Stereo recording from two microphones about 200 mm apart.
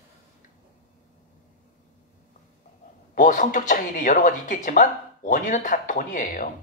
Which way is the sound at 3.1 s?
40° left (ahead or behind).